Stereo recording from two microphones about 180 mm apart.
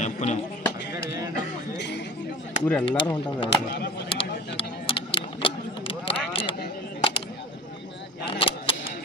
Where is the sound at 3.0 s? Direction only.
30° left (ahead or behind).